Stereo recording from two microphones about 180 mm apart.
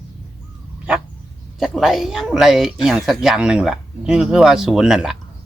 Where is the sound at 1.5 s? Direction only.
Centre (ahead or behind).